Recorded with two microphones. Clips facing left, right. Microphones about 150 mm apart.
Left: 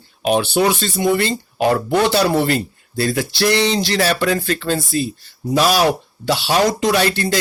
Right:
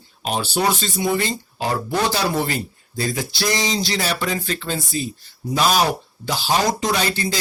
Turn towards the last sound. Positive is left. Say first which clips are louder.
# left 5 dB
turn(degrees=60)  # may be behind; listen again after turning